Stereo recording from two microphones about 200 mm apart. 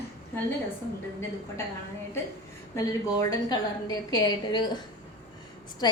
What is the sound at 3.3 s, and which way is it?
A woman's voice, 20° left (ahead or behind).